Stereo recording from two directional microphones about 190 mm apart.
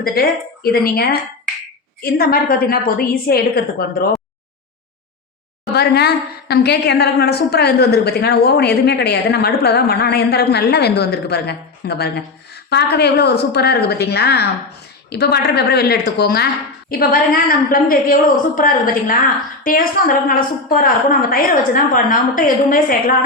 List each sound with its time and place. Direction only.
0.0 s a woman's voice: 55° left (ahead or behind)
5.7 s a woman's voice: 60° left (ahead or behind)